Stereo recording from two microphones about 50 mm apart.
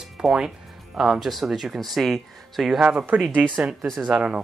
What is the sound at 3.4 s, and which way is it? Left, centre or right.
Speech, right.